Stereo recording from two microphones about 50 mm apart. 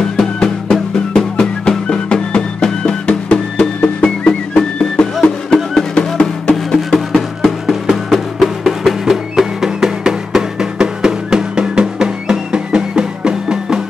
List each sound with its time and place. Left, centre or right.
0.2 s music: centre
6.5 s music: centre